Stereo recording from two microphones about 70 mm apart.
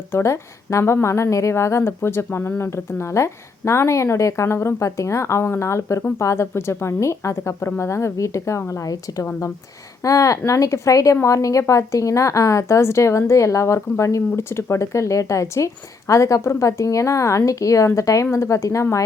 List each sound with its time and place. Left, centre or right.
0.1 s a woman's voice: left